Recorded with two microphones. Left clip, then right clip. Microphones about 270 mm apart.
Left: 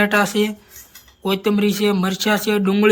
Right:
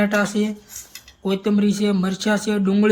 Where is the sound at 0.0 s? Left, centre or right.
Centre.